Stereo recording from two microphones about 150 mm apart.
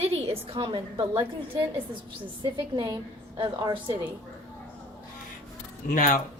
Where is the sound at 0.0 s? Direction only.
40° right (ahead or behind).